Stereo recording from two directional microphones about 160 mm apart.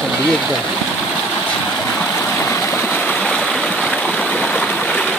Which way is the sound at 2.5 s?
15° left (ahead or behind).